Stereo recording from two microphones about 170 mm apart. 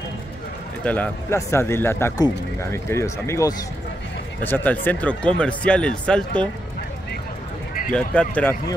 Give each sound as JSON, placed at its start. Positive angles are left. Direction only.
{"t": 0.8, "sound": "speech", "side_deg": 10}
{"t": 7.9, "sound": "speech", "side_deg": 5}